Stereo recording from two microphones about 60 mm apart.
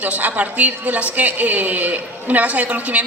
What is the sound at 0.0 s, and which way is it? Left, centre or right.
A woman's voice, right.